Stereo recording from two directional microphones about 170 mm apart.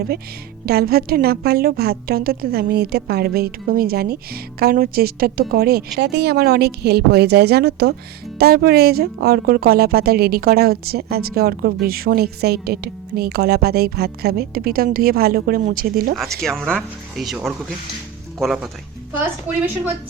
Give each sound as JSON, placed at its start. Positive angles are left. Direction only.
{"t": 0.6, "sound": "speech", "side_deg": -65}
{"t": 16.1, "sound": "speech", "side_deg": 0}
{"t": 19.2, "sound": "a woman's voice", "side_deg": -10}